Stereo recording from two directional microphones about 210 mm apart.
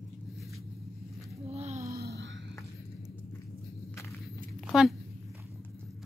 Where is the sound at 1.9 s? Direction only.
50° right (ahead or behind).